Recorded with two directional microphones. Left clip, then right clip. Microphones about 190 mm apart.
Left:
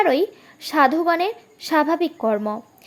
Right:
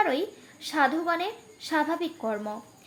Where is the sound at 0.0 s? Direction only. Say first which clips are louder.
Left 8 dB; 45° left (ahead or behind).